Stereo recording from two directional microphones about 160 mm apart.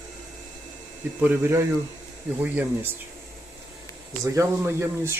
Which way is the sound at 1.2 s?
15° right (ahead or behind).